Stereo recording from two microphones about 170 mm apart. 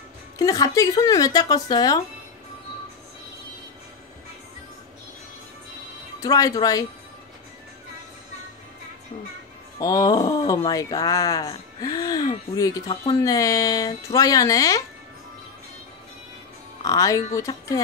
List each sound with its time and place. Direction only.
0.4 s speech: 20° left (ahead or behind)
6.2 s speech: 20° left (ahead or behind)
9.8 s speech: 20° left (ahead or behind)
16.8 s speech: 20° left (ahead or behind)